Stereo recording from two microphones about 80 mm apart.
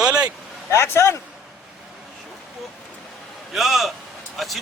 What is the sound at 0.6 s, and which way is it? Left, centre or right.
Speech, left.